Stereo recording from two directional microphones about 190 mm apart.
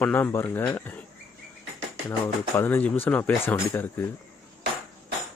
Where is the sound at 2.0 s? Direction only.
10° left (ahead or behind).